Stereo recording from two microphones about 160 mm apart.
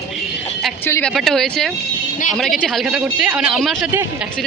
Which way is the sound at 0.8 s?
10° left (ahead or behind).